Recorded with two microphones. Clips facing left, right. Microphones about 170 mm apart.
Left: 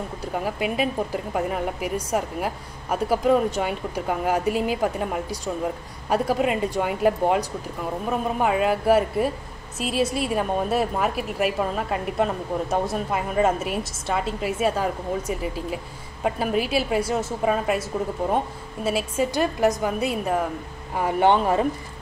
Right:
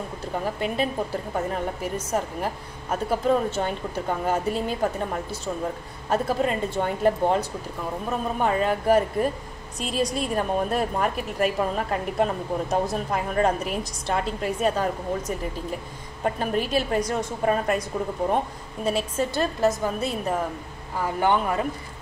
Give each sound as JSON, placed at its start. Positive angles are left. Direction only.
{"t": 0.2, "sound": "a woman's voice", "side_deg": 10}
{"t": 18.9, "sound": "a woman's voice", "side_deg": 5}
{"t": 19.3, "sound": "speech", "side_deg": 15}
{"t": 20.9, "sound": "speech", "side_deg": 20}